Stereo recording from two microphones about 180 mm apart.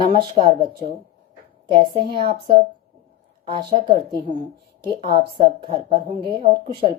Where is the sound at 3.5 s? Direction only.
25° right (ahead or behind).